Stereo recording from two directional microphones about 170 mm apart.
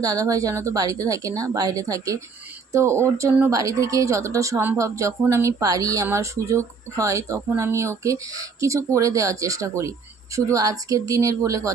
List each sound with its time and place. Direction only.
0.0 s speech: 20° right (ahead or behind)